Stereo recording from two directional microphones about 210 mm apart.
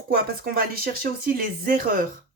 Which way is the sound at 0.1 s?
45° right (ahead or behind).